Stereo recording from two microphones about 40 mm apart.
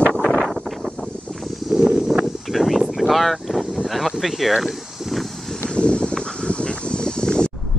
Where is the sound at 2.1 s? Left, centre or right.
Centre.